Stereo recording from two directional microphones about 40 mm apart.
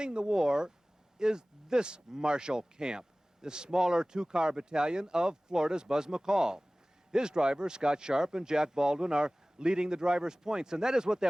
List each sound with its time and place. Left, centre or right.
0.0 s speech: right